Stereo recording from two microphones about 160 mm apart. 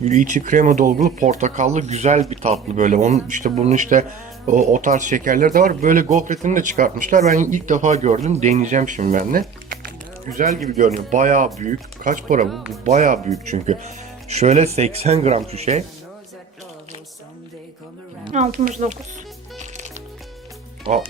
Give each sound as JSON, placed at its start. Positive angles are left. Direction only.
{"t": 0.0, "sound": "speech", "side_deg": -50}
{"t": 12.5, "sound": "speech", "side_deg": 0}
{"t": 12.8, "sound": "speech", "side_deg": -50}
{"t": 14.3, "sound": "speech", "side_deg": -45}
{"t": 18.5, "sound": "speech", "side_deg": -65}
{"t": 19.5, "sound": "music", "side_deg": -45}
{"t": 20.9, "sound": "speech", "side_deg": -35}